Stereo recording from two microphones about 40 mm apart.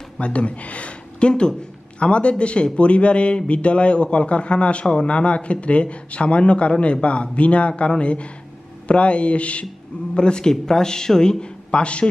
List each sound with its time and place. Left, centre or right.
0.2 s a man's voice: left
10.1 s a man's voice: left